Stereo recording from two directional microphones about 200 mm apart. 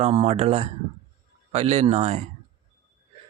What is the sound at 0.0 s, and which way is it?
Speech, 30° right (ahead or behind).